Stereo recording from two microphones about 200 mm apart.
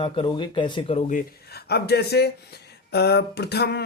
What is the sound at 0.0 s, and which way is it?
Speech, 25° left (ahead or behind).